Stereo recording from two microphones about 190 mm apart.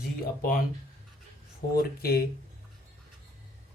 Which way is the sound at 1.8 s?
50° left (ahead or behind).